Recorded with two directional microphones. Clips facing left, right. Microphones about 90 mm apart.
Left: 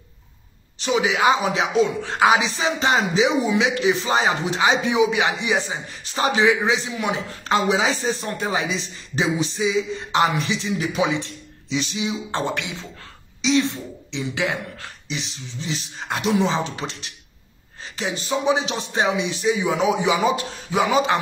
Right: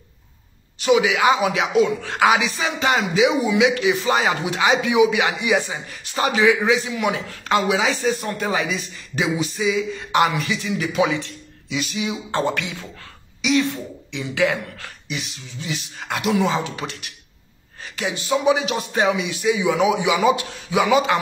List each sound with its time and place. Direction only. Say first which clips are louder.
0.7 s a man's voice: right 3 dB; 30° left (ahead or behind)